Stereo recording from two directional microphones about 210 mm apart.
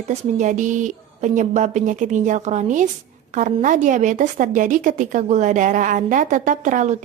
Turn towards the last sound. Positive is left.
turn(degrees=-35)  # may be behind; listen again after turning